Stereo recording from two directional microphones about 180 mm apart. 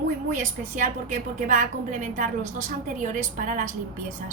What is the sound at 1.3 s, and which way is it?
A woman's voice, 45° right (ahead or behind).